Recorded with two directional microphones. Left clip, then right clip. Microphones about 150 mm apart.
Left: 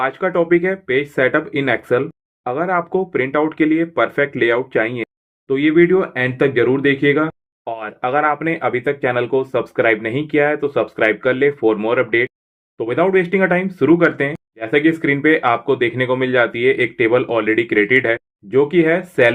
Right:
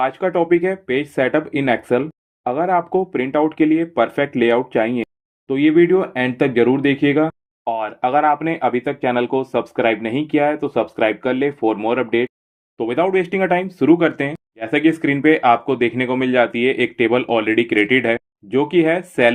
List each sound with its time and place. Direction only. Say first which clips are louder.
0.0 s speech: even; 35° right (ahead or behind)